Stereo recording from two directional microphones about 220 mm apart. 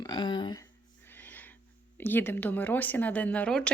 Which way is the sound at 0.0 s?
20° left (ahead or behind).